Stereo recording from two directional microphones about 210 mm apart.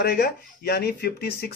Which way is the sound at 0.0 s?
50° left (ahead or behind).